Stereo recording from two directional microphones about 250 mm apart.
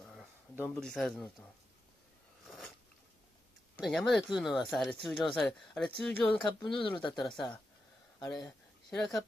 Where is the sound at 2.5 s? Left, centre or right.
Centre.